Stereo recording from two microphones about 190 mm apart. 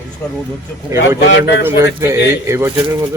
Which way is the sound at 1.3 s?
60° left (ahead or behind).